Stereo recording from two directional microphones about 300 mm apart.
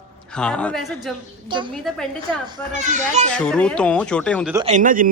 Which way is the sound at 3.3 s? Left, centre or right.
Centre.